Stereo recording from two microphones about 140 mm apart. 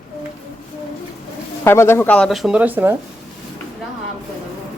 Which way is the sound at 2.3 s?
Centre (ahead or behind).